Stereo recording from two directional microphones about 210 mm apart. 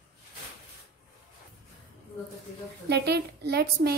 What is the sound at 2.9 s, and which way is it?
A woman's voice, 50° right (ahead or behind).